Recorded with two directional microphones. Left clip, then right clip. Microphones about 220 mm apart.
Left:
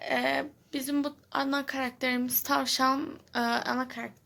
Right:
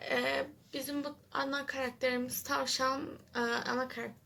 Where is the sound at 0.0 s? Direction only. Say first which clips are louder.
Left 4 dB; 40° left (ahead or behind).